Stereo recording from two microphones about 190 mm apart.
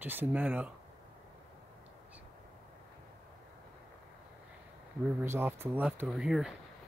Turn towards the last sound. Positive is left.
turn(degrees=-5)  # may be behind; listen again after turning